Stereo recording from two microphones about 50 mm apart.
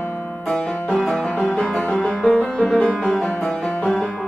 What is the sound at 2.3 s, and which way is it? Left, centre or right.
Music, left.